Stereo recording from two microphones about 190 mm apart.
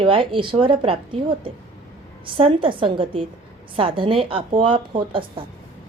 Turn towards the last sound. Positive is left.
turn(degrees=-25)  # may be behind; listen again after turning